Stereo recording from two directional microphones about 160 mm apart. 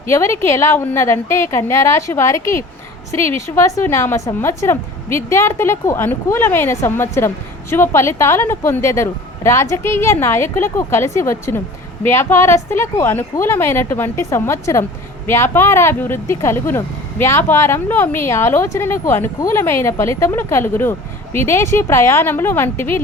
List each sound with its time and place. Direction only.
0.1 s speech: 15° left (ahead or behind)
3.4 s speech: 20° left (ahead or behind)